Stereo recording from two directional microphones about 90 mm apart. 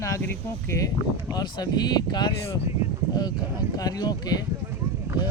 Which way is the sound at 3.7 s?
45° left (ahead or behind).